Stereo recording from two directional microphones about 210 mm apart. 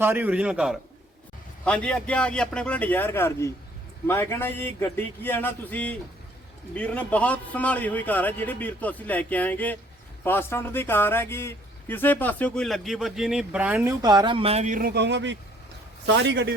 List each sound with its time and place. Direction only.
0.0 s a man's voice: 10° right (ahead or behind)
14.0 s a man's voice: 20° right (ahead or behind); by 16.6 s 55° right (ahead or behind)